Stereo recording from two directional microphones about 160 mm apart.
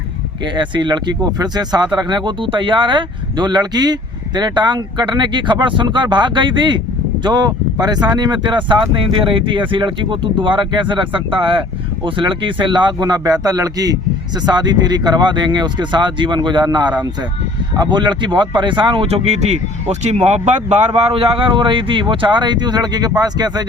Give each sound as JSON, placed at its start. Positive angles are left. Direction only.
{"t": 0.5, "sound": "speech", "side_deg": -30}